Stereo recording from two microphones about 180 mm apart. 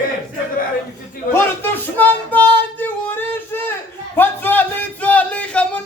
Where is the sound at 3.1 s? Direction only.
10° left (ahead or behind).